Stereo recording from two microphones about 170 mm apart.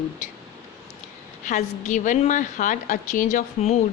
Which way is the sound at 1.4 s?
45° left (ahead or behind).